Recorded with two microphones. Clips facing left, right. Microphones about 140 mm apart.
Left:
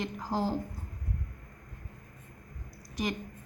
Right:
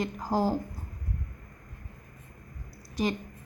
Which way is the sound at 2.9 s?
30° right (ahead or behind).